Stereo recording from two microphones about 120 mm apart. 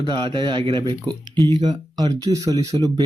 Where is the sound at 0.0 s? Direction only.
40° right (ahead or behind).